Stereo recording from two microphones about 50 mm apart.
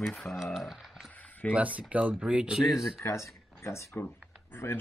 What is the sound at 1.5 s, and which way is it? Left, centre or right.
Speech, right.